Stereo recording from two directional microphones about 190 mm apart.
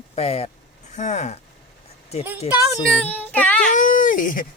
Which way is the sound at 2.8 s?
5° left (ahead or behind).